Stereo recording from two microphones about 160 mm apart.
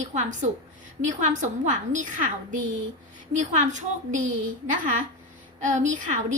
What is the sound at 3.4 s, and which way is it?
Speech, 50° right (ahead or behind).